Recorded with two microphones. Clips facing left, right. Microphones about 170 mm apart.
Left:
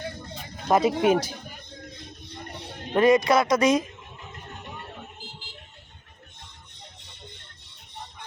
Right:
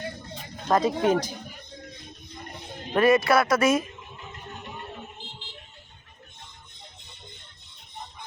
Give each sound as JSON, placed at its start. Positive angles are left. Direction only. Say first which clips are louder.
{"t": 0.7, "sound": "speech", "louder": "left 2 dB", "side_deg": 10}
{"t": 2.9, "sound": "speech", "louder": "left 1 dB", "side_deg": 15}